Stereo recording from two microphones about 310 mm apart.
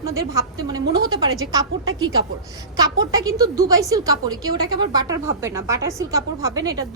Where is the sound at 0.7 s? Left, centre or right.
Centre.